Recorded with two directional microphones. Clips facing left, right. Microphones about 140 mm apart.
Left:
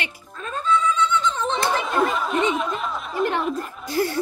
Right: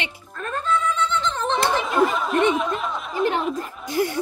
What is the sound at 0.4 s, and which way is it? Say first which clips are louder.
Music: left 1 dB; 60° right (ahead or behind).